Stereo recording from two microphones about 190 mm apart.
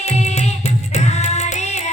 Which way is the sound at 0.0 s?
35° left (ahead or behind).